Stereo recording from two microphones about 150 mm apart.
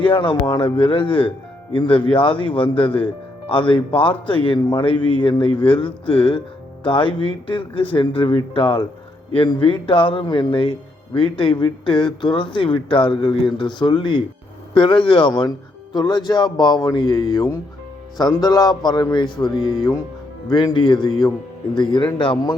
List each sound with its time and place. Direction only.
0.0 s speech: 35° left (ahead or behind)